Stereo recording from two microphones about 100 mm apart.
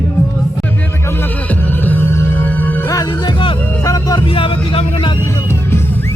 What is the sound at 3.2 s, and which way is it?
Music, 55° left (ahead or behind).